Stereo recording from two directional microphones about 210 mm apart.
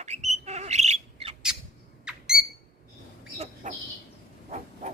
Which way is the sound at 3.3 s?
35° right (ahead or behind).